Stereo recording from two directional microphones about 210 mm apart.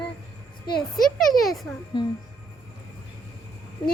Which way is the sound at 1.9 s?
20° left (ahead or behind).